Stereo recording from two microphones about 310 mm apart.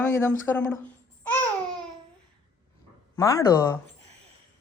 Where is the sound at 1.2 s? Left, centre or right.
Centre.